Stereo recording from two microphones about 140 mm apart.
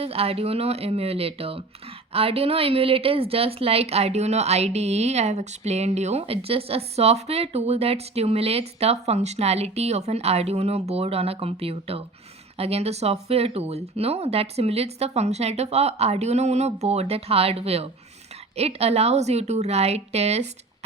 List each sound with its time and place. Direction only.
0.0 s a woman's voice: 45° right (ahead or behind)